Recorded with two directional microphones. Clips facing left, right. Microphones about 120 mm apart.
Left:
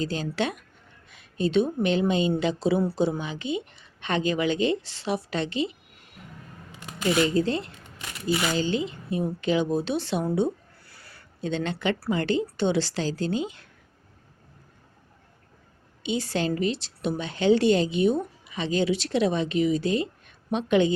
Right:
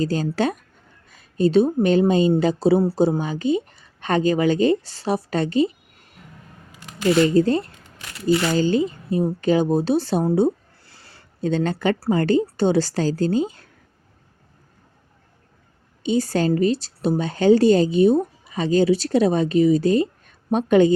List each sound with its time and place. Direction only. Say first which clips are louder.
0.0 s a woman's voice: right 6 dB; 40° right (ahead or behind)
7.3 s a woman's voice: right 7 dB; 45° right (ahead or behind); by 11.3 s 25° right (ahead or behind)
11.3 s a woman's voice: right 7 dB; 40° right (ahead or behind)
16.0 s a woman's voice: right 7 dB; 45° right (ahead or behind)